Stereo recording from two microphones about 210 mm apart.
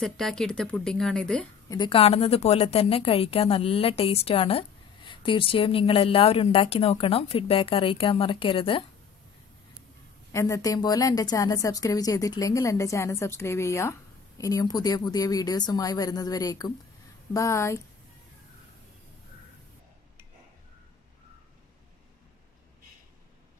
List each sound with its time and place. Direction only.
0.0 s a woman's voice: centre (ahead or behind)
1.7 s a woman's voice: 25° left (ahead or behind)
10.3 s a woman's voice: 15° left (ahead or behind)